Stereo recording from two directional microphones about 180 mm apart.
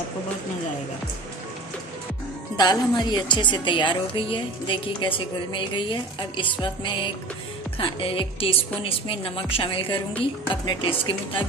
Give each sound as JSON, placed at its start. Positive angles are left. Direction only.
{"t": 2.6, "sound": "a woman's voice", "side_deg": 25}